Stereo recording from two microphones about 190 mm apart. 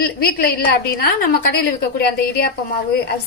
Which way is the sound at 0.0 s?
55° left (ahead or behind).